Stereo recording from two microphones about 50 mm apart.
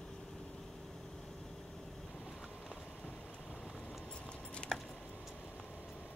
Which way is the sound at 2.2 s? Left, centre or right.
Centre.